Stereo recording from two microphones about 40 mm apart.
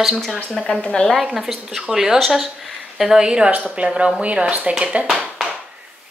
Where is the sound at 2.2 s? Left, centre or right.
Centre.